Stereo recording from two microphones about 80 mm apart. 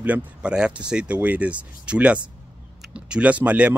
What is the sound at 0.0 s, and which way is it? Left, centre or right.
Speech, centre.